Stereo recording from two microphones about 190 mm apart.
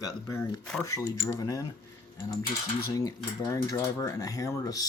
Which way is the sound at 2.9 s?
15° left (ahead or behind).